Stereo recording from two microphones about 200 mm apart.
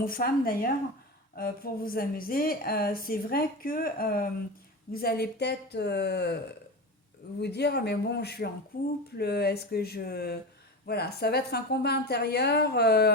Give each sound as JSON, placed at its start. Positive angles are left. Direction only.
{"t": 0.0, "sound": "speech", "side_deg": 45}
{"t": 7.4, "sound": "speech", "side_deg": 55}